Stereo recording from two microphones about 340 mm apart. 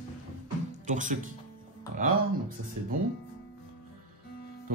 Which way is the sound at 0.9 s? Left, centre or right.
Right.